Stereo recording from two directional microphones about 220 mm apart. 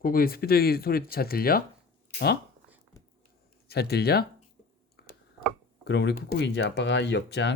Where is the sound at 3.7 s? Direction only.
45° left (ahead or behind).